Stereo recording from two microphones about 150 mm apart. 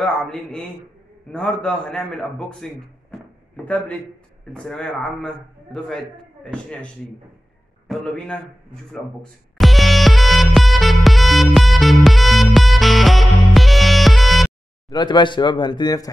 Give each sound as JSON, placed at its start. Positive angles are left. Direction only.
{"t": 0.0, "sound": "a man's voice", "side_deg": 5}
{"t": 7.9, "sound": "a man's voice", "side_deg": 5}
{"t": 8.9, "sound": "music", "side_deg": 0}
{"t": 14.9, "sound": "speech", "side_deg": 30}